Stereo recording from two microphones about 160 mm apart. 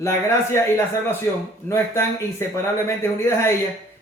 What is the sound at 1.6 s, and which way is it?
Speech, 15° left (ahead or behind).